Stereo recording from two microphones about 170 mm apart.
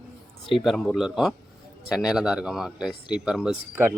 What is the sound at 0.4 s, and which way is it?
Speech, centre (ahead or behind).